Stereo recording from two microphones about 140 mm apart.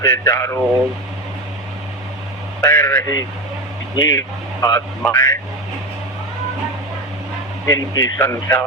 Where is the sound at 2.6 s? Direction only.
20° left (ahead or behind).